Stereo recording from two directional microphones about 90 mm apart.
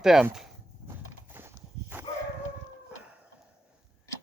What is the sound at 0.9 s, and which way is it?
Horse, 25° right (ahead or behind).